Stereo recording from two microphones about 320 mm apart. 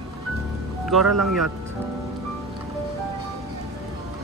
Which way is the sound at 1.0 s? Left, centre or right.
Right.